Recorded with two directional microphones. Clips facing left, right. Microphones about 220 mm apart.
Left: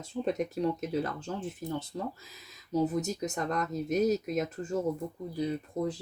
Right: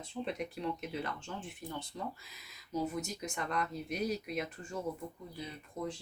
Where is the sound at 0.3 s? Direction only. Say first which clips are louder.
Left 9 dB; 40° left (ahead or behind).